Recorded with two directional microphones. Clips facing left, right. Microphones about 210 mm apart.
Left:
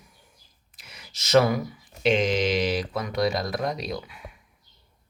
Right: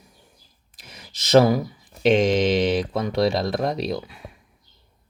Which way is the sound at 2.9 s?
30° right (ahead or behind).